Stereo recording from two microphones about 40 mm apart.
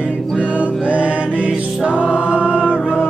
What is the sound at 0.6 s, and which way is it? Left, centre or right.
Music, right.